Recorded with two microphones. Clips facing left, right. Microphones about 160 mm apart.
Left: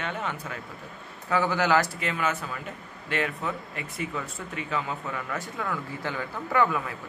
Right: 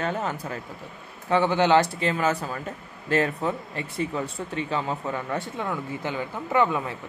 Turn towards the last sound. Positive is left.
turn(degrees=-25)  # may be behind; listen again after turning